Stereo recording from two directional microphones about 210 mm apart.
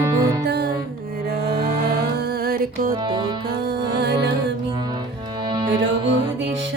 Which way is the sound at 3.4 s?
50° right (ahead or behind).